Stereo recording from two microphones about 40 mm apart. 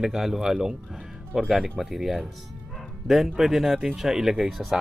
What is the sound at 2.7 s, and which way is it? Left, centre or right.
Bow-wow, centre.